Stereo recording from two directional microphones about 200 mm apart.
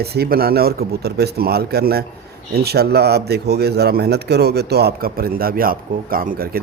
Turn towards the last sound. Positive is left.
turn(degrees=-45)  # may be behind; listen again after turning